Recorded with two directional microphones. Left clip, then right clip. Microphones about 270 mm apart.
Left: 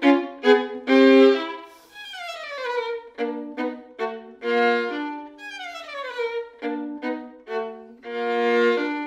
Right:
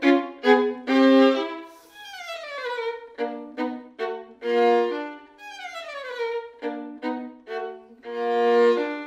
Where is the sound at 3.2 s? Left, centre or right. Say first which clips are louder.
Left 2 dB; left.